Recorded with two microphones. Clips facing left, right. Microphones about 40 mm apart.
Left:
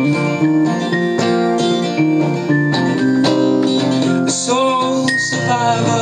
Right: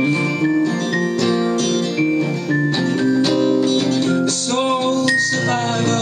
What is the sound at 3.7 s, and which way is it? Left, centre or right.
Music, left.